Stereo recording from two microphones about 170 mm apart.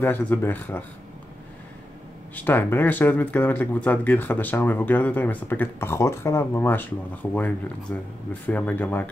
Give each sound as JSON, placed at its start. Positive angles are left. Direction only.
{"t": 0.0, "sound": "speech", "side_deg": 10}
{"t": 2.3, "sound": "speech", "side_deg": 10}
{"t": 7.9, "sound": "speech", "side_deg": 10}